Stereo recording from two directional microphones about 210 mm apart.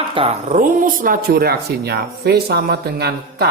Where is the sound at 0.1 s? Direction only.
25° right (ahead or behind).